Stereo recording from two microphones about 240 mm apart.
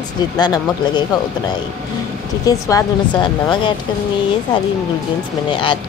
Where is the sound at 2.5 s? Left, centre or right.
Centre.